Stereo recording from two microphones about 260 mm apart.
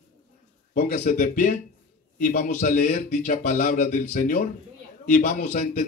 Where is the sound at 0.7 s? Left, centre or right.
Left.